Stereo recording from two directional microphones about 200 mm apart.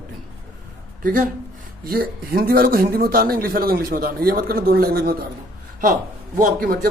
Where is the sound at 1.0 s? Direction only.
45° right (ahead or behind).